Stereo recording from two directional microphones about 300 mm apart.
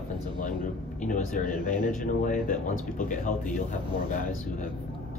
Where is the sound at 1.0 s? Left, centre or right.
Left.